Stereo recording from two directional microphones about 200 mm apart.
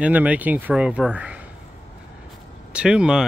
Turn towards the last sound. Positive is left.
turn(degrees=-5)  # may be behind; listen again after turning